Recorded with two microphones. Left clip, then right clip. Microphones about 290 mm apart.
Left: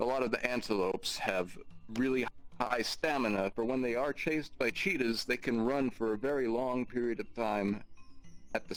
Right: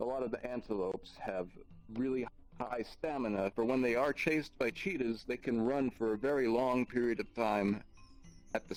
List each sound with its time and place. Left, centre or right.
0.0 s speech: left
3.5 s speech: centre
4.6 s speech: centre
6.2 s speech: centre